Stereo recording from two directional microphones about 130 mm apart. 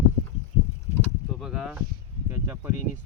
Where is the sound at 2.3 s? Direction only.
20° right (ahead or behind).